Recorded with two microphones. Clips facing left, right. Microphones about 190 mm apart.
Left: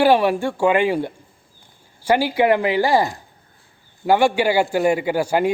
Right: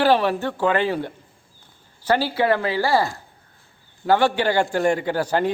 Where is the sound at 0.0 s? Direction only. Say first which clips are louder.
Left 3 dB; 10° left (ahead or behind).